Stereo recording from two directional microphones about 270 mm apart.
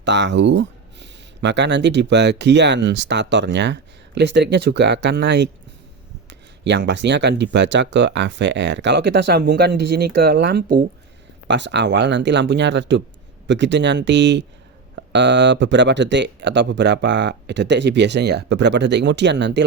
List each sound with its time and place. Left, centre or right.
0.0 s speech: right
6.7 s speech: right